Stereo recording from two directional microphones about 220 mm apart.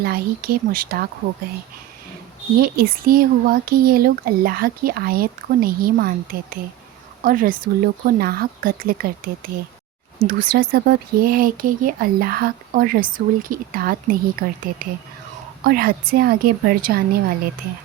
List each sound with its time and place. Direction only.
0.0 s a woman's voice: 45° right (ahead or behind)
2.6 s a woman's voice: 40° right (ahead or behind)
15.6 s a woman's voice: 45° right (ahead or behind)